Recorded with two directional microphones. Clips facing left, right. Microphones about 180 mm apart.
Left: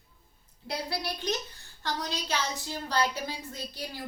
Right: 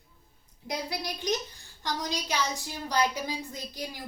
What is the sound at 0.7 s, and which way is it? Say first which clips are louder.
A woman's voice: even; 15° right (ahead or behind).